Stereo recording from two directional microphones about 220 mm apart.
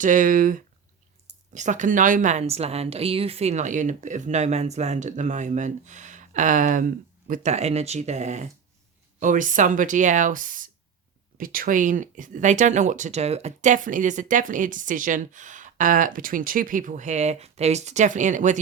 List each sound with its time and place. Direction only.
0.0 s speech: 35° right (ahead or behind)